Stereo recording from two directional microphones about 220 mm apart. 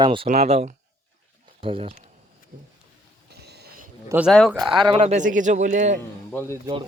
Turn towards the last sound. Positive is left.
turn(degrees=10)  # may be behind; listen again after turning